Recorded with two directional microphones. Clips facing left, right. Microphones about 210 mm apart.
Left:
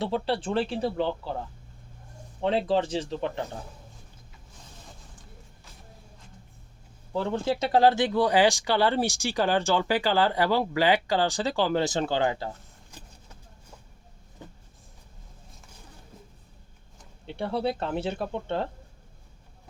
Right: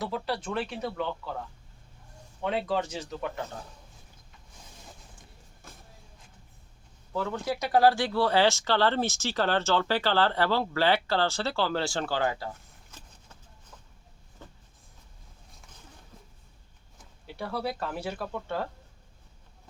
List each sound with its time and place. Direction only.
0.0 s speech: 30° left (ahead or behind)
5.7 s music: 50° right (ahead or behind)
7.1 s speech: 30° left (ahead or behind)
14.4 s a sound: 15° left (ahead or behind)
17.2 s speech: 25° left (ahead or behind)